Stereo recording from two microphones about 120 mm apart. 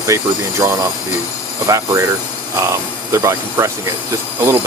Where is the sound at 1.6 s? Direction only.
25° right (ahead or behind).